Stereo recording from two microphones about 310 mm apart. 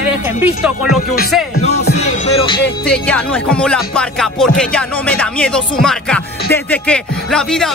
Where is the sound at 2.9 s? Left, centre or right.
Centre.